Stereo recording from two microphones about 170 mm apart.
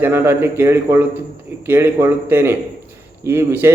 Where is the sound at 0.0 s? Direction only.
15° right (ahead or behind).